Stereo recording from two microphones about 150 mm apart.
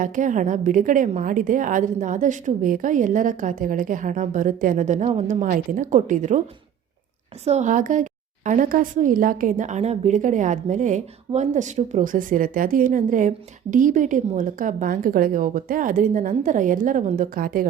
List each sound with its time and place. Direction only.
0.0 s a woman's voice: 60° right (ahead or behind)
7.4 s a woman's voice: 50° right (ahead or behind); by 17.7 s 75° right (ahead or behind)